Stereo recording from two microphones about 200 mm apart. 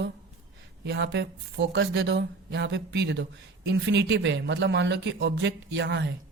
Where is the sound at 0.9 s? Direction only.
60° right (ahead or behind).